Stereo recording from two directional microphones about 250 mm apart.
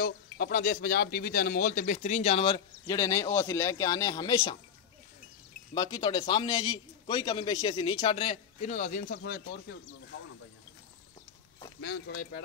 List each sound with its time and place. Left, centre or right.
0.0 s speech: left; by 4.6 s centre
5.8 s speech: centre; by 9.8 s left
11.8 s speech: left